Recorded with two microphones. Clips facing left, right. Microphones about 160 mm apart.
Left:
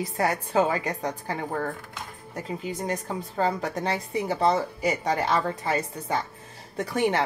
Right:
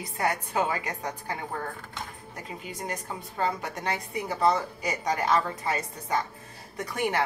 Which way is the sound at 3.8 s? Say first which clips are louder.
Left 3 dB; 30° left (ahead or behind).